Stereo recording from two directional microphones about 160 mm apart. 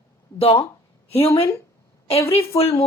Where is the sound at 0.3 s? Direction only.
40° left (ahead or behind).